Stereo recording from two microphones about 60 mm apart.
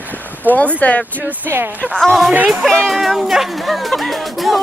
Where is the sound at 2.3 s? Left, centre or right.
Right.